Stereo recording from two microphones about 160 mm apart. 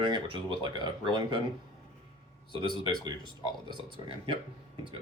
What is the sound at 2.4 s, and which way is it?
Speech, 30° left (ahead or behind).